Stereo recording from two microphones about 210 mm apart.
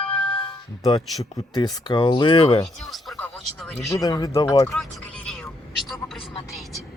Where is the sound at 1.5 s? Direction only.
20° left (ahead or behind).